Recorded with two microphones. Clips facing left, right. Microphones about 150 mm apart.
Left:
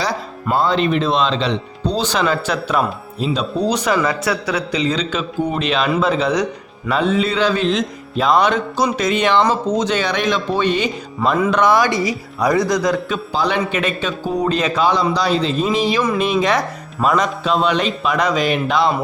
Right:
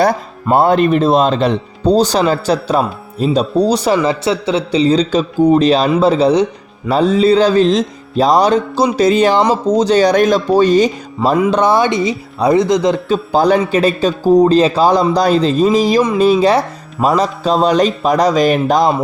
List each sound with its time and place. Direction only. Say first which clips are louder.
0.5 s speech: right 6 dB; 55° right (ahead or behind); by 13.1 s 25° right (ahead or behind)
13.3 s a man's voice: right 7 dB; 45° right (ahead or behind)